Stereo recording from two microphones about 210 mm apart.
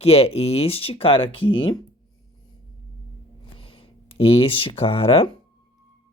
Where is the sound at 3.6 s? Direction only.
25° left (ahead or behind).